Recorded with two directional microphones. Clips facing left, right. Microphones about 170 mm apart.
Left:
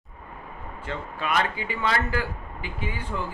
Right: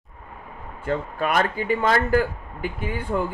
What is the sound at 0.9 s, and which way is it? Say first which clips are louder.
Speech: right 6 dB; 45° right (ahead or behind).